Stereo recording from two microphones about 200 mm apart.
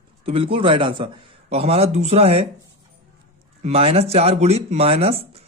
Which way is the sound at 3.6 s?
30° right (ahead or behind).